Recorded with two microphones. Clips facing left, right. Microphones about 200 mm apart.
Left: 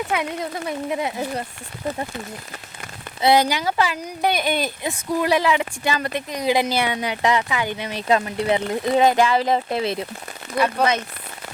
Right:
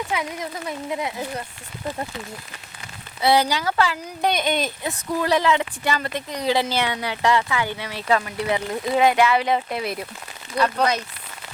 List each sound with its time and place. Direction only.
0.9 s speech: 25° left (ahead or behind)
3.2 s speech: 15° left (ahead or behind)
9.0 s speech: 35° left (ahead or behind)
10.5 s speech: 50° left (ahead or behind)